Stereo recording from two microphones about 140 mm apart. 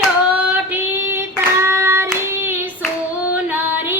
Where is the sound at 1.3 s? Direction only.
20° right (ahead or behind).